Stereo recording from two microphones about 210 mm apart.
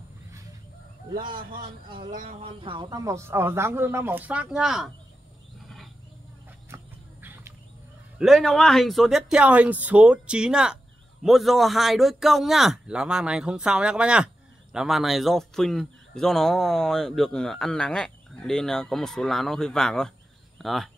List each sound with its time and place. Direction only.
1.4 s a man's voice: 45° right (ahead or behind)
2.0 s speech: 30° right (ahead or behind); by 4.8 s centre (ahead or behind)
6.7 s chicken: 10° right (ahead or behind)
8.2 s a man's voice: centre (ahead or behind)